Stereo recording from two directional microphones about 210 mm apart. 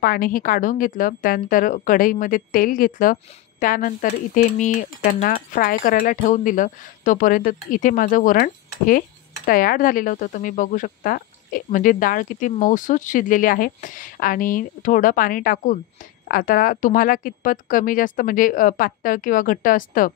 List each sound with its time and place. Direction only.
0.0 s a woman's voice: 45° left (ahead or behind)